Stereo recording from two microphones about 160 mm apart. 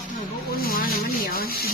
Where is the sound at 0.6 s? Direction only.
65° left (ahead or behind).